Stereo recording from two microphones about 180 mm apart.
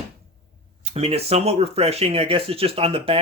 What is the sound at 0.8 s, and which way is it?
Speech, 35° right (ahead or behind).